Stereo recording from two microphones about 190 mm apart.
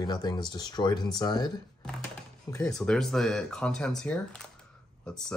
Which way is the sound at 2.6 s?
5° left (ahead or behind).